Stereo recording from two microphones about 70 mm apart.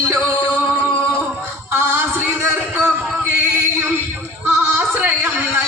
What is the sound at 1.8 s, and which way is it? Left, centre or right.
Music, right.